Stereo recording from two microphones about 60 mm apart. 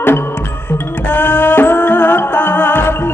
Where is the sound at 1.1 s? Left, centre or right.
Left.